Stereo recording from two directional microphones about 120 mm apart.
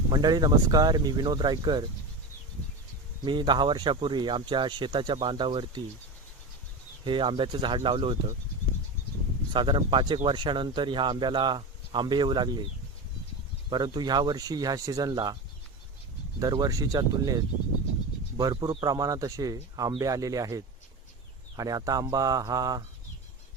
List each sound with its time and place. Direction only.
0.1 s speech: 35° right (ahead or behind)
3.2 s speech: 40° right (ahead or behind)
7.0 s speech: 40° right (ahead or behind)
9.5 s speech: 40° right (ahead or behind)
13.7 s speech: 40° right (ahead or behind)
16.4 s speech: 30° right (ahead or behind)